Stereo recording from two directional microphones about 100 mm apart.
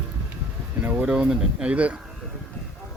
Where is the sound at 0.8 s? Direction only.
15° right (ahead or behind).